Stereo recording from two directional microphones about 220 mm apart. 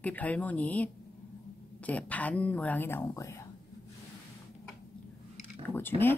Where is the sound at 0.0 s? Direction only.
5° left (ahead or behind).